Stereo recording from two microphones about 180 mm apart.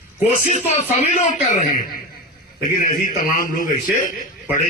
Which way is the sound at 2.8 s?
50° left (ahead or behind).